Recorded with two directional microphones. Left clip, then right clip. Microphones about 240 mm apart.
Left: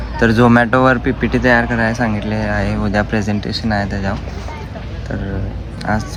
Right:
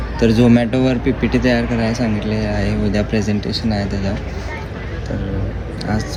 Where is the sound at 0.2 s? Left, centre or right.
Centre.